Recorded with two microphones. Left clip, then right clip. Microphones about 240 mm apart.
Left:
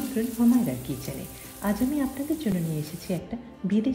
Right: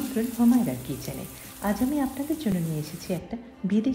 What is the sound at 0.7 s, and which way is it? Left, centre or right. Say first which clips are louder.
A woman's voice: even; centre.